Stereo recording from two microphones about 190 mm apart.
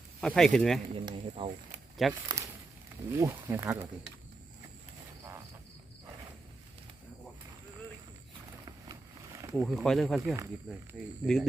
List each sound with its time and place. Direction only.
0.2 s speech: 5° left (ahead or behind)
0.9 s speech: 25° right (ahead or behind)
2.0 s speech: centre (ahead or behind)
3.1 s speech: 15° right (ahead or behind)
9.6 s speech: centre (ahead or behind)
10.3 s speech: 15° right (ahead or behind)
11.2 s speech: 5° right (ahead or behind)